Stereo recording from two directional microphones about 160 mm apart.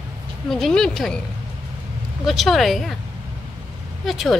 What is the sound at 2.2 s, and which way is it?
Speech, centre (ahead or behind).